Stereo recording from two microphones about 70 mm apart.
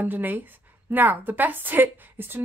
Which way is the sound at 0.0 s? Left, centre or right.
Right.